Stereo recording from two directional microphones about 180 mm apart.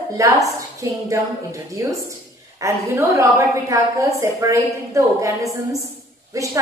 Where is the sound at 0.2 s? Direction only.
20° right (ahead or behind).